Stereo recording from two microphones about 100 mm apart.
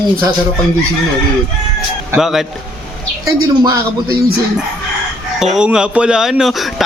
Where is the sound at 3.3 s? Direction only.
40° right (ahead or behind).